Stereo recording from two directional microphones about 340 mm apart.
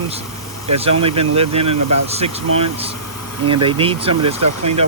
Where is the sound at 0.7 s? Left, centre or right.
Centre.